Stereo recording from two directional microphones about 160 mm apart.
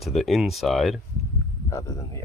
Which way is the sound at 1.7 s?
20° left (ahead or behind).